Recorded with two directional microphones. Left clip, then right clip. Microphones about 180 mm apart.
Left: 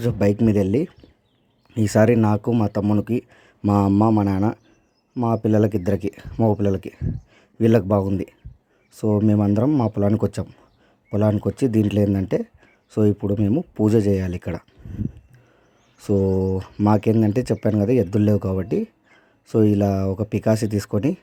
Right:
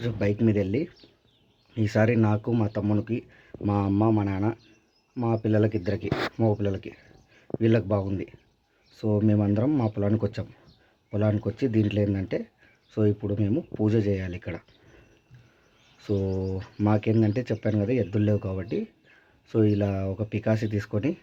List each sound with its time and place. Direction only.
0.0 s speech: 45° left (ahead or behind)
16.2 s speech: 45° left (ahead or behind)